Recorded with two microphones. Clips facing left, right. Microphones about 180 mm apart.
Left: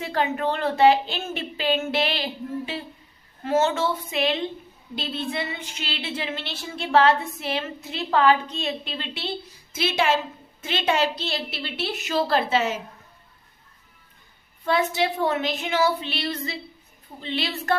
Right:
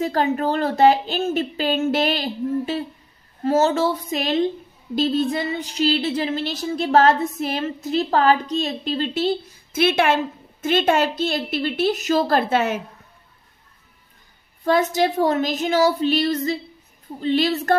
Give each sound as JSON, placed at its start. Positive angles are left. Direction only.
{"t": 0.0, "sound": "speech", "side_deg": -40}
{"t": 14.6, "sound": "a woman's voice", "side_deg": -45}